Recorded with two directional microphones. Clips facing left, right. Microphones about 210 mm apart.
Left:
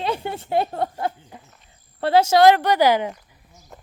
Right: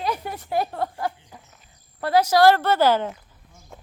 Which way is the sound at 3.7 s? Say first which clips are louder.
Even; centre (ahead or behind).